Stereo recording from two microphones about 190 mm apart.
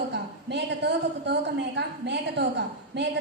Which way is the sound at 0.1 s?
60° right (ahead or behind).